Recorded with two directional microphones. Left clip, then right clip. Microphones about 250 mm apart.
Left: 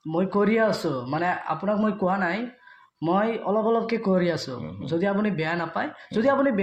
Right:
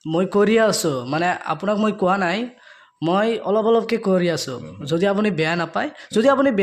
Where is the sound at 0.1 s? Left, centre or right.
Right.